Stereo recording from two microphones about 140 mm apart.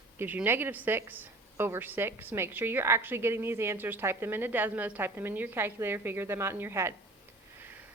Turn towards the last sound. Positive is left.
turn(degrees=-20)  # may be behind; listen again after turning